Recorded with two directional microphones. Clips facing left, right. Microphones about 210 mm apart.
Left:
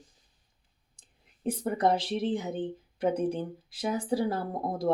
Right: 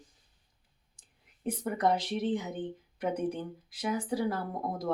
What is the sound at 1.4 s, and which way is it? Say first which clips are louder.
Speech: left 2 dB; 30° left (ahead or behind).